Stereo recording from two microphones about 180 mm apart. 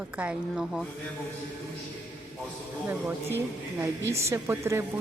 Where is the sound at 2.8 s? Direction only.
10° right (ahead or behind).